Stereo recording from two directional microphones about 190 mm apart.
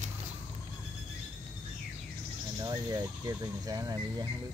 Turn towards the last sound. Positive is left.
turn(degrees=-20)  # may be behind; listen again after turning